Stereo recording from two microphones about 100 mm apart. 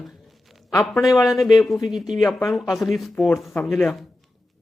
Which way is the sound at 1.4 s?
45° left (ahead or behind).